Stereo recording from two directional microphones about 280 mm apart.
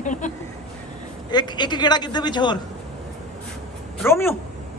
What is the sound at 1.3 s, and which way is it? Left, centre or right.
A man's voice, centre.